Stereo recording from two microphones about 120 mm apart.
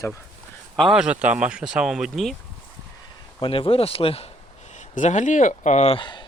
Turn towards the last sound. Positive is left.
turn(degrees=40)  # may be behind; listen again after turning